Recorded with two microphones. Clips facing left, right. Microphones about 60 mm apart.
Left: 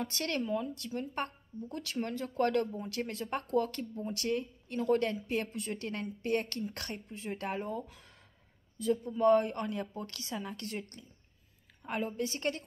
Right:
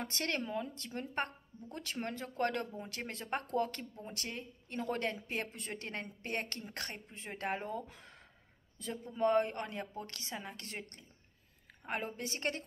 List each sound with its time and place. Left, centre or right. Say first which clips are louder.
0.0 s a woman's voice: left 3 dB; right